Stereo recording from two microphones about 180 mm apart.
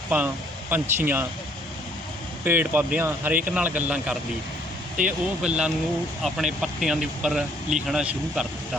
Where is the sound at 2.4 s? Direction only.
10° right (ahead or behind).